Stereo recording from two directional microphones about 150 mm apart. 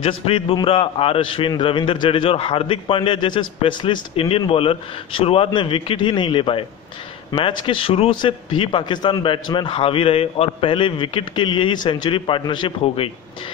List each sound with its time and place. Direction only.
0.0 s a man's voice: 40° left (ahead or behind)